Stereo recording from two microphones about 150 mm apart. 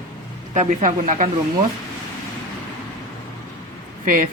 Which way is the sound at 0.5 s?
55° right (ahead or behind).